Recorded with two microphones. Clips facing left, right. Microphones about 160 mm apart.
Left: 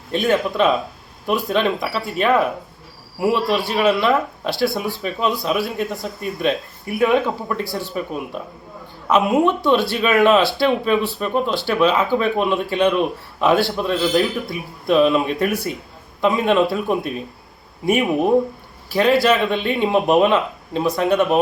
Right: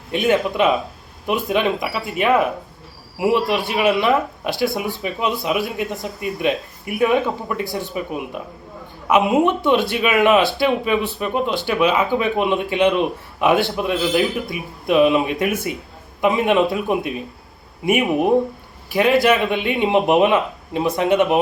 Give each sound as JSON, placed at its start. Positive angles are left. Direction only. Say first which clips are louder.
{"t": 0.1, "sound": "speech", "louder": "right 1 dB", "side_deg": -15}
{"t": 18.9, "sound": "speech", "louder": "even", "side_deg": -15}